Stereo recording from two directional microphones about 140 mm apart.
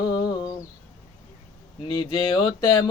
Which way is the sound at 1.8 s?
35° left (ahead or behind).